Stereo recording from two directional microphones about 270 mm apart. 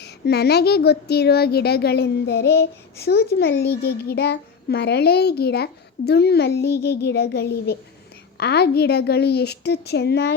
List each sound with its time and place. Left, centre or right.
0.0 s a woman's voice: left